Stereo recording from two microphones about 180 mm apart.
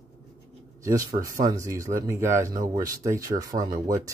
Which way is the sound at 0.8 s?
20° right (ahead or behind).